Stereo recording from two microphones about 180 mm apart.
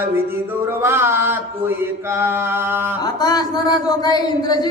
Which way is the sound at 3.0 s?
20° left (ahead or behind).